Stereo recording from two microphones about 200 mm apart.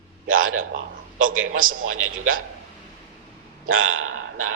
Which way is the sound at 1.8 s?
90° right.